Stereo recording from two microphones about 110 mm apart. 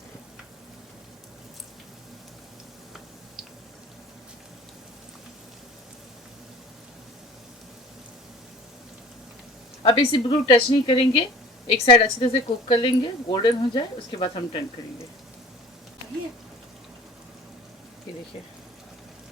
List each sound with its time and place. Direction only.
9.8 s a woman's voice: 50° left (ahead or behind)